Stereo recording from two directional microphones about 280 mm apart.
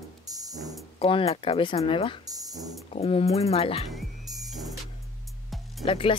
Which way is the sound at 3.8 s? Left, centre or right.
Centre.